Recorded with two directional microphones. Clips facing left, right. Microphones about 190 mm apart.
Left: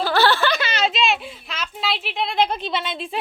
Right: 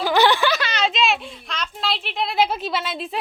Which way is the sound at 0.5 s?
5° left (ahead or behind).